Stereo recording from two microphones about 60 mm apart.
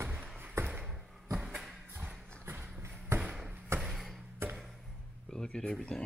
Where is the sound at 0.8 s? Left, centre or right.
Centre.